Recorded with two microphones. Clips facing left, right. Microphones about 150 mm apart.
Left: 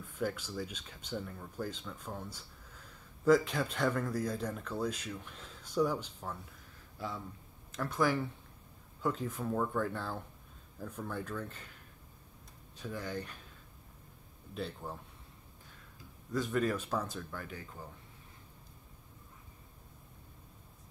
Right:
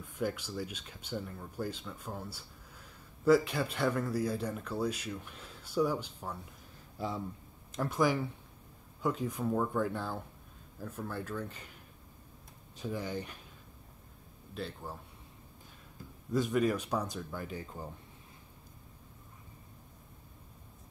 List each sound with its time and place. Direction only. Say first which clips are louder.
0.0 s speech: right 1 dB; 10° right (ahead or behind)
7.0 s speech: right 4 dB; 25° right (ahead or behind)
12.8 s speech: right 3 dB; 20° right (ahead or behind)
14.5 s a man's voice: left 1 dB; centre (ahead or behind)
16.3 s speech: right 3 dB; 15° right (ahead or behind)